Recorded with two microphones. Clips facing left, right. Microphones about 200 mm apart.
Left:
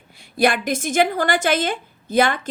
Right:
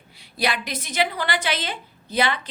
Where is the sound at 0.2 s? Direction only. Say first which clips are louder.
Left 7 dB; 50° left (ahead or behind).